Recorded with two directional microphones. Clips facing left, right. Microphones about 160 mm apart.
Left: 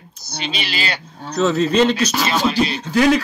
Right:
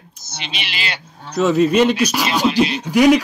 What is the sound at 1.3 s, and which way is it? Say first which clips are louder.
Speech: right 2 dB; 10° right (ahead or behind).